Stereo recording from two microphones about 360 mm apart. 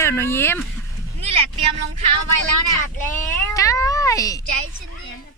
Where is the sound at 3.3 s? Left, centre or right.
Centre.